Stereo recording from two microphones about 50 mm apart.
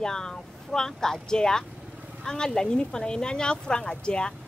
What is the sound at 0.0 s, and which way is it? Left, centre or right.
Speech, centre.